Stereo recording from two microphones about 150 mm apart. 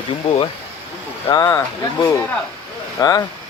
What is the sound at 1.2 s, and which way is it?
Speech, 25° left (ahead or behind).